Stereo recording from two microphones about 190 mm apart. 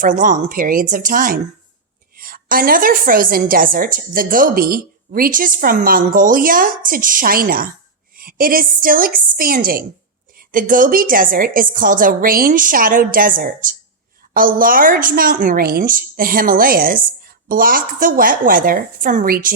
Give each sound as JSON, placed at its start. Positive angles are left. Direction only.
{"t": 0.0, "sound": "a woman's voice", "side_deg": -45}